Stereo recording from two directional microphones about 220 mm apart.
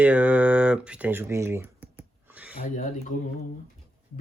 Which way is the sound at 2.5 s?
35° left (ahead or behind).